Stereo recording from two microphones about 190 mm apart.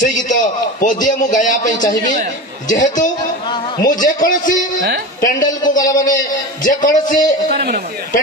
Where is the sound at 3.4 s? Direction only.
25° left (ahead or behind).